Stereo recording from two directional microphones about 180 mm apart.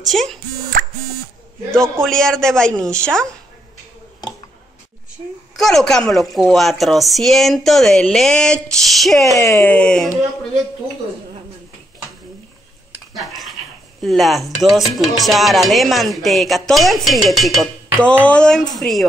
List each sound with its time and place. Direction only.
0.1 s speech: centre (ahead or behind)
1.7 s music: 5° left (ahead or behind)
5.6 s music: centre (ahead or behind)
9.2 s speech: 15° left (ahead or behind)
9.6 s music: 5° left (ahead or behind)
13.1 s a sound: centre (ahead or behind)
14.0 s music: centre (ahead or behind)